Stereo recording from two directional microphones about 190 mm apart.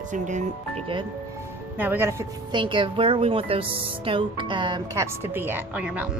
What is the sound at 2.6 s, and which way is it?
A woman's voice, 25° right (ahead or behind).